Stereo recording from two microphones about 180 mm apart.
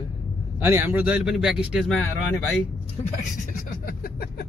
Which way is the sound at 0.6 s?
10° right (ahead or behind).